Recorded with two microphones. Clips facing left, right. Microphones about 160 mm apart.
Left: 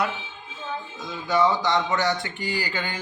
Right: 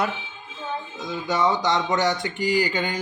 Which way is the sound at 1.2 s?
20° right (ahead or behind).